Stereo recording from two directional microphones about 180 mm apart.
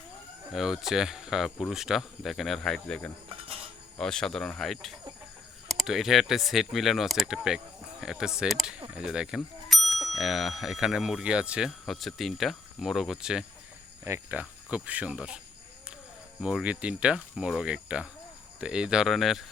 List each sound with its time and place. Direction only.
0.5 s speech: centre (ahead or behind)
3.2 s cutlery: 30° right (ahead or behind)
3.9 s speech: 5° left (ahead or behind)
8.4 s a sound: centre (ahead or behind)
9.0 s speech: 5° right (ahead or behind)
14.0 s cricket: 10° right (ahead or behind)
16.4 s speech: 5° right (ahead or behind)